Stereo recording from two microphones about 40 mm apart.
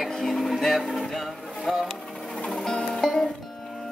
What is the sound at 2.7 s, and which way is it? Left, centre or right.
Music, centre.